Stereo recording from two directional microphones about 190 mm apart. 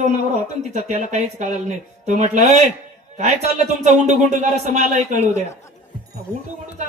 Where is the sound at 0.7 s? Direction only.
40° right (ahead or behind).